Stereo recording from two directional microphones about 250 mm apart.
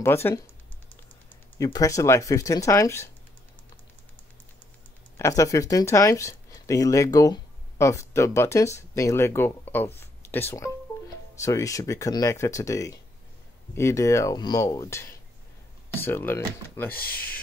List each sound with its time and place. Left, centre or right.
0.0 s speech: centre
1.6 s speech: centre
5.1 s speech: centre
16.9 s speech: left